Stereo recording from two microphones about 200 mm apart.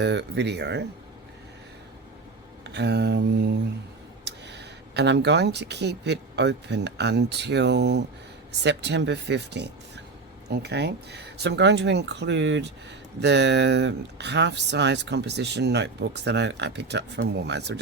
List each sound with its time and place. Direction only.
0.0 s speech: 60° right (ahead or behind)
2.6 s speech: 60° right (ahead or behind)